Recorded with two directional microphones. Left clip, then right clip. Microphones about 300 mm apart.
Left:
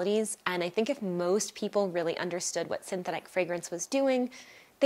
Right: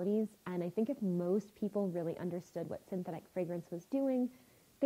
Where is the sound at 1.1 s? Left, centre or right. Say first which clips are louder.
Left 8 dB; centre.